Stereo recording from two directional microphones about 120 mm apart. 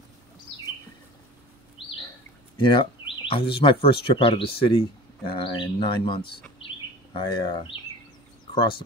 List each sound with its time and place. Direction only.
2.5 s speech: 40° left (ahead or behind)